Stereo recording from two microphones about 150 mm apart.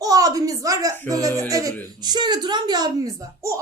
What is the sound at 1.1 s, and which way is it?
Speech, 25° right (ahead or behind).